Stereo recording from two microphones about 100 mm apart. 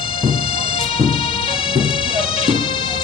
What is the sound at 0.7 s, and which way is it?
Music, 75° left (ahead or behind).